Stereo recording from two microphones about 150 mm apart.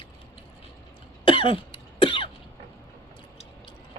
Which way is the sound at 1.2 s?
35° left (ahead or behind).